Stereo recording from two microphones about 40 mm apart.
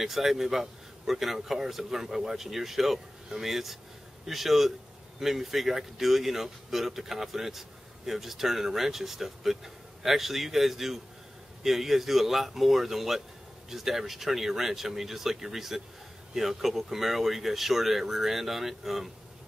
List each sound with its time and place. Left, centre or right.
0.0 s speech: centre